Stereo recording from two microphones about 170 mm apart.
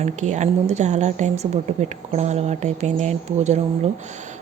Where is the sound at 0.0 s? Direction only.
45° right (ahead or behind).